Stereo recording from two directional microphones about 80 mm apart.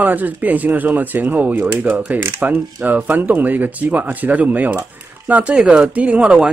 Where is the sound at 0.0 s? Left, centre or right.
Right.